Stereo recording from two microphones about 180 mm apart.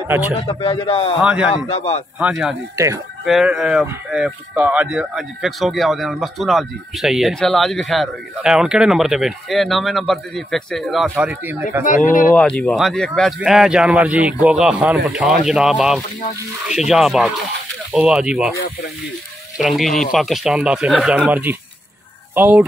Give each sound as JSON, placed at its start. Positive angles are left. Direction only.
{"t": 0.3, "sound": "a man's voice", "side_deg": 30}
{"t": 1.2, "sound": "speech", "side_deg": -5}
{"t": 1.7, "sound": "a man's voice", "side_deg": 35}
{"t": 2.1, "sound": "speech", "side_deg": -5}
{"t": 11.8, "sound": "speech", "side_deg": 45}
{"t": 12.4, "sound": "speech", "side_deg": 5}
{"t": 19.6, "sound": "speech", "side_deg": 0}